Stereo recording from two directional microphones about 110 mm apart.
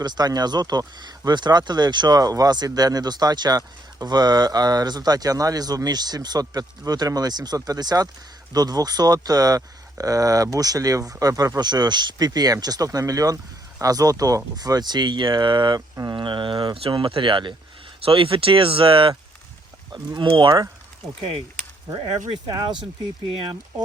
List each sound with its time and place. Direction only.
0.0 s speech: 40° right (ahead or behind)
19.9 s speech: 40° right (ahead or behind)
21.9 s speech: 45° right (ahead or behind)